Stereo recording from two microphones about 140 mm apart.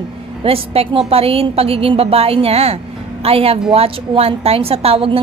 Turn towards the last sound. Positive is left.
turn(degrees=-45)  # may be behind; listen again after turning